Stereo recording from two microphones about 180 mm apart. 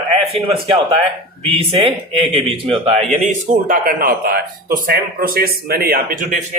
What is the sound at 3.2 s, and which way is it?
Speech, 50° right (ahead or behind).